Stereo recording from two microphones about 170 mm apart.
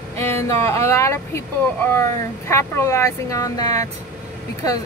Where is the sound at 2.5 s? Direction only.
15° left (ahead or behind).